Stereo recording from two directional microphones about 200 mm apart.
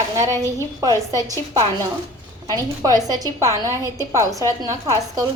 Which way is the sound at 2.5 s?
20° right (ahead or behind).